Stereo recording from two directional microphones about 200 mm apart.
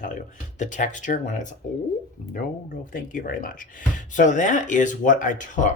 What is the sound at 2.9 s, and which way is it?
Speech, 45° left (ahead or behind).